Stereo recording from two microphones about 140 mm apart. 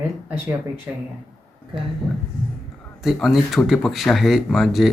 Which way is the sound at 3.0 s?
Centre (ahead or behind).